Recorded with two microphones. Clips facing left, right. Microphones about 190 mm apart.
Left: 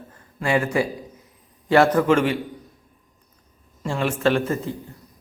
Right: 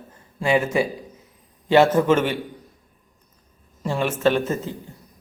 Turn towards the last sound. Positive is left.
turn(degrees=-25)  # may be behind; listen again after turning